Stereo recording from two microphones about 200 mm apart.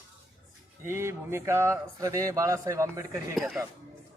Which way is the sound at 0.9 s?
10° right (ahead or behind).